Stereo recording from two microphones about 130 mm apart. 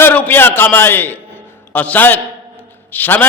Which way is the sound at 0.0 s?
15° left (ahead or behind).